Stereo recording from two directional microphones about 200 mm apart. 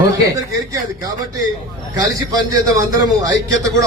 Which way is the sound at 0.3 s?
15° right (ahead or behind).